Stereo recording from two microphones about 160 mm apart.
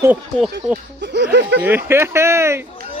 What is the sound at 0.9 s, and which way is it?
Speech, 90° right.